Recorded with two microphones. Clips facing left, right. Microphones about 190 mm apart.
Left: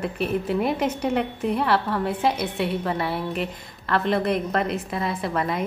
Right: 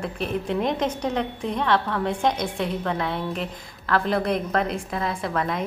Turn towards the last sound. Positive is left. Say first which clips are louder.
# left 1 dB
turn(degrees=5)  # may be behind; listen again after turning